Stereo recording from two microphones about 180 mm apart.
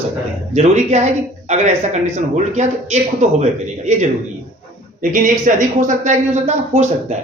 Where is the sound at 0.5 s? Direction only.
40° right (ahead or behind).